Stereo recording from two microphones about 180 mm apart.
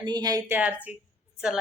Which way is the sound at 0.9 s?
10° right (ahead or behind).